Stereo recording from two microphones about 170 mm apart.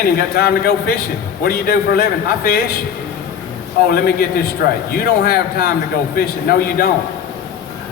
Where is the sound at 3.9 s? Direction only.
65° left (ahead or behind).